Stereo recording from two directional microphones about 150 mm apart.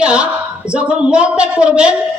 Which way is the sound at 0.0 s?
5° right (ahead or behind).